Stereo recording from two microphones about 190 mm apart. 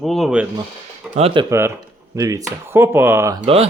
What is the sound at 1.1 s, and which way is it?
Speech, 30° right (ahead or behind).